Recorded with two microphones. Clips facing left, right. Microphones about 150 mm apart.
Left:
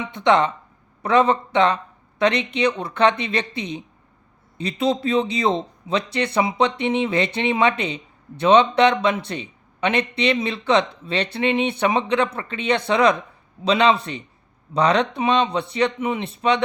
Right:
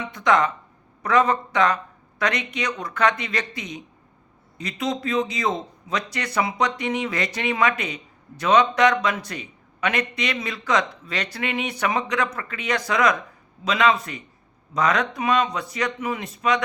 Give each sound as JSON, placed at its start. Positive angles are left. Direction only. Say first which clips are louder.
{"t": 0.0, "sound": "a man's voice", "louder": "left 3 dB", "side_deg": 25}